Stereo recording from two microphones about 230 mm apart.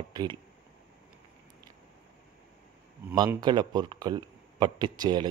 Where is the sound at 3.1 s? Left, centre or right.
Centre.